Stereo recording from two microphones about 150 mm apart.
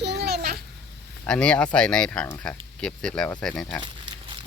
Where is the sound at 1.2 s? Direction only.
5° left (ahead or behind).